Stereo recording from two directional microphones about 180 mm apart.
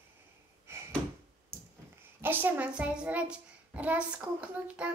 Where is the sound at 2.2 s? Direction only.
10° right (ahead or behind).